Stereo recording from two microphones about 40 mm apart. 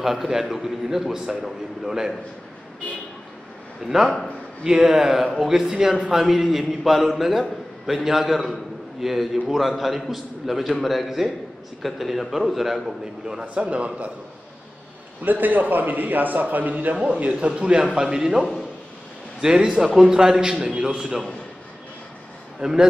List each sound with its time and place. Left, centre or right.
0.0 s a man's voice: centre
3.8 s a man's voice: centre
13.4 s a man's voice: right
15.2 s a man's voice: right
17.5 s a man's voice: right
19.4 s a man's voice: centre
20.5 s a man's voice: right
21.0 s a man's voice: centre
22.6 s a man's voice: centre